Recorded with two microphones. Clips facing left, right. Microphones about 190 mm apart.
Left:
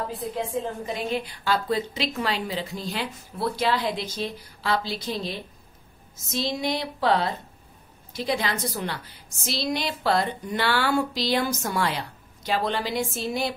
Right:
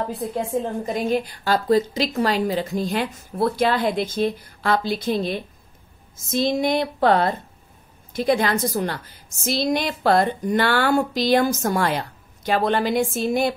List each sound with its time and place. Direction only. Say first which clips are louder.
0.5 s a woman's voice: right 5 dB; 45° right (ahead or behind)